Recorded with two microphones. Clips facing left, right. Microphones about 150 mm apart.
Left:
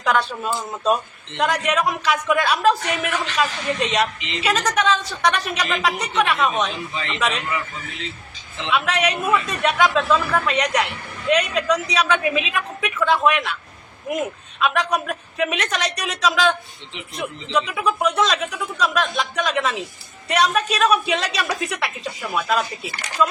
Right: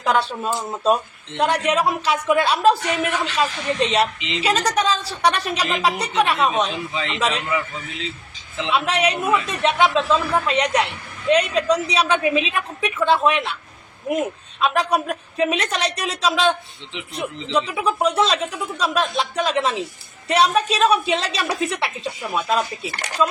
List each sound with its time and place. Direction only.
0.0 s speech: 30° right (ahead or behind)
1.4 s speech: 30° right (ahead or behind)
8.7 s a man's voice: 30° right (ahead or behind)
14.6 s a man's voice: 30° right (ahead or behind)